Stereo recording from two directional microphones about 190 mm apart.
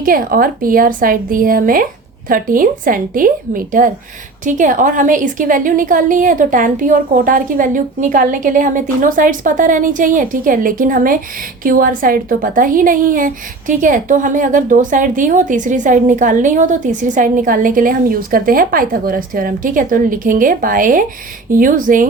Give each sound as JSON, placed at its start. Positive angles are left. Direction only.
{"t": 0.0, "sound": "a woman's voice", "side_deg": -50}